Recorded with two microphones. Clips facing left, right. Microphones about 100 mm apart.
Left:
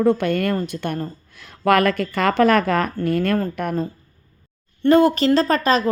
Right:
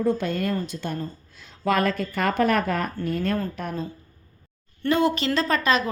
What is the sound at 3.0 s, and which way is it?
Speech, 75° left (ahead or behind).